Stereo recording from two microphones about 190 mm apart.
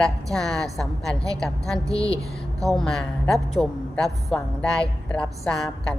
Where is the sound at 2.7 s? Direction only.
Centre (ahead or behind).